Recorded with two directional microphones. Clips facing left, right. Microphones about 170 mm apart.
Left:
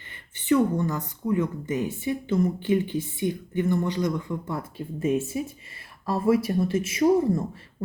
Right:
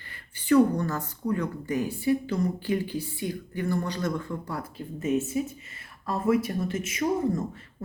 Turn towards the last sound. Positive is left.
turn(degrees=30)  # may be behind; listen again after turning